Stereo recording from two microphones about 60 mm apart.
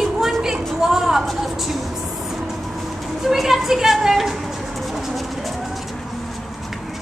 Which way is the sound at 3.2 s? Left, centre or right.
Centre.